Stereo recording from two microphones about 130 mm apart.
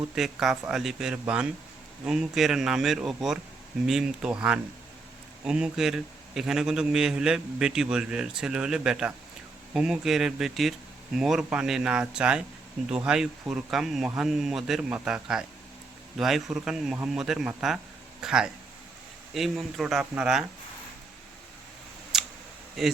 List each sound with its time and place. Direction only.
0.2 s a man's voice: centre (ahead or behind)
22.1 s camera: centre (ahead or behind)
22.8 s a man's voice: centre (ahead or behind)